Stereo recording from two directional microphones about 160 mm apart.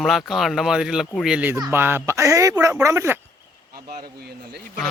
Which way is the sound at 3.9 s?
65° right (ahead or behind).